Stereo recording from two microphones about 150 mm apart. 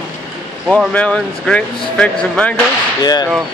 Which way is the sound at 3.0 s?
25° left (ahead or behind).